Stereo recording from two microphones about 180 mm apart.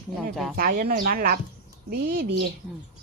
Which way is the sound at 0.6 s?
55° right (ahead or behind).